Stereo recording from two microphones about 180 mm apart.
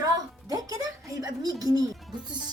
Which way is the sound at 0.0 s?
20° right (ahead or behind).